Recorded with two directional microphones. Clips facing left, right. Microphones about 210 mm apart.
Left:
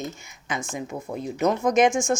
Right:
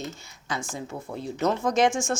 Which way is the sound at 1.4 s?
15° left (ahead or behind).